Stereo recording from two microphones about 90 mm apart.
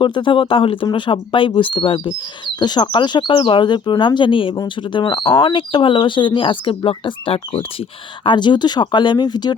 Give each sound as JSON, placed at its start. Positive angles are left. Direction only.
{"t": 0.0, "sound": "speech", "side_deg": 65}
{"t": 0.9, "sound": "speech", "side_deg": 65}
{"t": 2.6, "sound": "speech", "side_deg": 55}
{"t": 8.2, "sound": "speech", "side_deg": 60}